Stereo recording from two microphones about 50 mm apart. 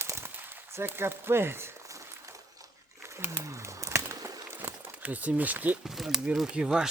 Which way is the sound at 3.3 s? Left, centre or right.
Right.